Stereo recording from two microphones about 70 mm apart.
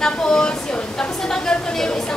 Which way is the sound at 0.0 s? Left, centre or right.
Centre.